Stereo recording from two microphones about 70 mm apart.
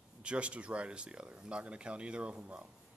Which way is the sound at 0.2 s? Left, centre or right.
Centre.